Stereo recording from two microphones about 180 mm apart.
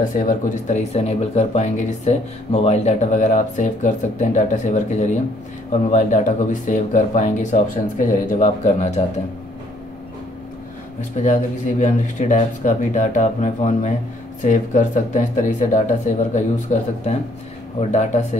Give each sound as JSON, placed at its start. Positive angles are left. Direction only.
{"t": 0.1, "sound": "speech", "side_deg": 50}
{"t": 11.2, "sound": "speech", "side_deg": 45}